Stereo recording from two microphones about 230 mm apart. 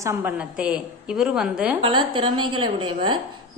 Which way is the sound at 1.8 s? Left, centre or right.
Right.